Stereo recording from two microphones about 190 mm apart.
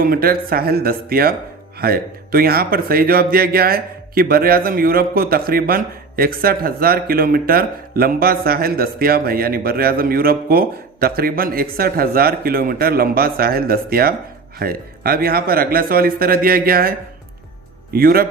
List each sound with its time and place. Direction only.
0.0 s speech: 50° right (ahead or behind)
17.9 s speech: 50° right (ahead or behind)